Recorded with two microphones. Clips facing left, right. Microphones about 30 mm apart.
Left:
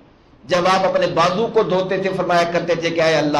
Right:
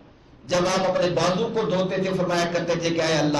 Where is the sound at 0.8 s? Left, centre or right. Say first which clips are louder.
Left 5 dB; left.